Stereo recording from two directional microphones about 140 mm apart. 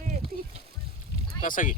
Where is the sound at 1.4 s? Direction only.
70° left (ahead or behind).